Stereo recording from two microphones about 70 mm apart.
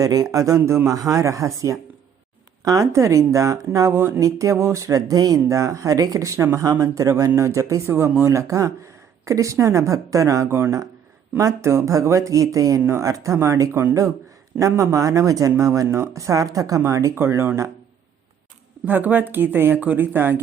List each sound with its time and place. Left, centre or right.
0.0 s speech: right
4.2 s speech: right
7.9 s speech: right
16.8 s speech: right
17.2 s speech: right
18.9 s speech: right